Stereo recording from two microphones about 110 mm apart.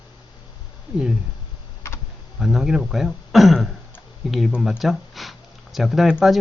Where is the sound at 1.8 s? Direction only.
25° left (ahead or behind).